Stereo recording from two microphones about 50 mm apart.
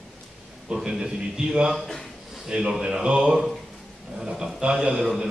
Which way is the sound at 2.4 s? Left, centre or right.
Centre.